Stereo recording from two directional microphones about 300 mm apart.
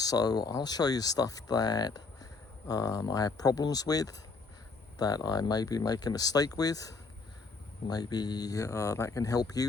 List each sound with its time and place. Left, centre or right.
0.0 s speech: centre